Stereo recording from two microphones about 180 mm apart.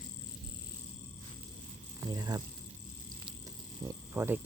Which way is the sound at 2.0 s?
20° right (ahead or behind).